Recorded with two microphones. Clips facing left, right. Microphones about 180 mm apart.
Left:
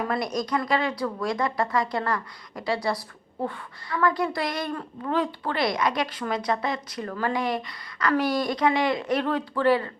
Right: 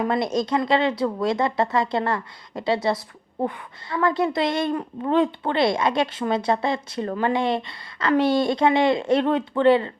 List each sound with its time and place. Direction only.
0.1 s a woman's voice: 25° right (ahead or behind)